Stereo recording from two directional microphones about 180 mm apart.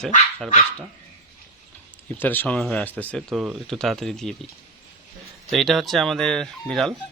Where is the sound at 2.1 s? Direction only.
10° left (ahead or behind).